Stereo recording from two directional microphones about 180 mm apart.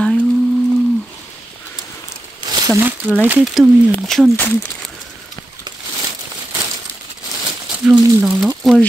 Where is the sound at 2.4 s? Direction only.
20° right (ahead or behind).